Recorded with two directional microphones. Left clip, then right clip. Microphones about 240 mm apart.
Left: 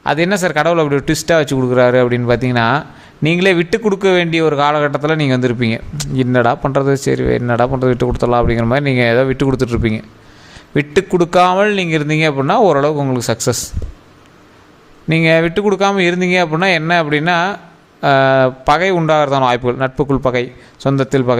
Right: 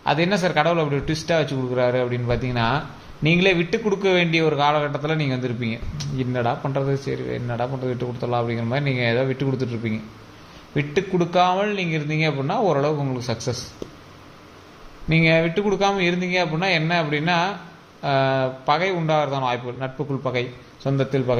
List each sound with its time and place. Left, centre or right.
0.0 s a man's voice: left
15.1 s a man's voice: left